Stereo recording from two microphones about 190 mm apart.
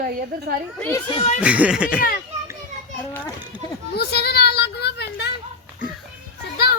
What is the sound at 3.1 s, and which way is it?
Speech, 10° left (ahead or behind).